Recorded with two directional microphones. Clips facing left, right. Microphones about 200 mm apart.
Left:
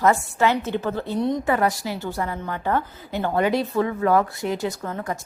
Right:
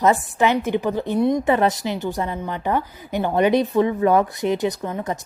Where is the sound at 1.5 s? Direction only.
20° right (ahead or behind).